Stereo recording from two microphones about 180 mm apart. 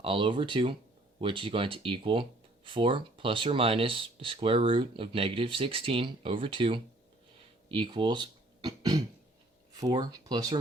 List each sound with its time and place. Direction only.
0.0 s speech: 30° right (ahead or behind)